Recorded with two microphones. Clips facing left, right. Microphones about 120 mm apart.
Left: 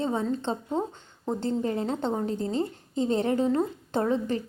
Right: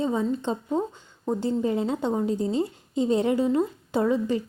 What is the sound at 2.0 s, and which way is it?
Speech, 20° left (ahead or behind).